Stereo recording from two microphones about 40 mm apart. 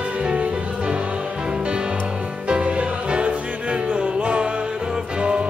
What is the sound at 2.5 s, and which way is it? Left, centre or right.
Music, right.